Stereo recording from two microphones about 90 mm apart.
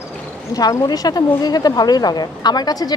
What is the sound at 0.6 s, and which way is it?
Speech, 45° left (ahead or behind).